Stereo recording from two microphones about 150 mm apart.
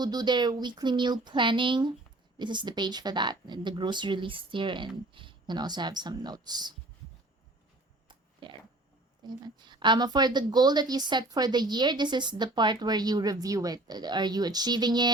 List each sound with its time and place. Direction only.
0.0 s a woman's voice: 30° right (ahead or behind)
8.0 s a sound: 30° right (ahead or behind)
9.2 s a woman's voice: 30° right (ahead or behind)